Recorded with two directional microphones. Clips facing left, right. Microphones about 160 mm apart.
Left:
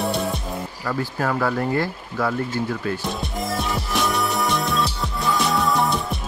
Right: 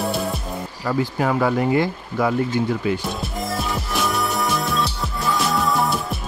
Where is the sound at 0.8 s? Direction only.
15° right (ahead or behind).